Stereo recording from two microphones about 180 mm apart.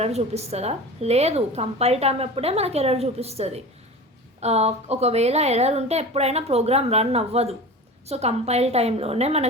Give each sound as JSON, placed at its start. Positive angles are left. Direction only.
{"t": 0.0, "sound": "a woman's voice", "side_deg": -35}